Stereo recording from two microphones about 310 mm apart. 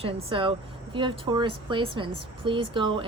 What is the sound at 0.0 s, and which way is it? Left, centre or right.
A woman's voice, centre.